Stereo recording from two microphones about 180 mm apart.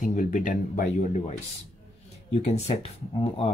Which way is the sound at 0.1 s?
45° left (ahead or behind).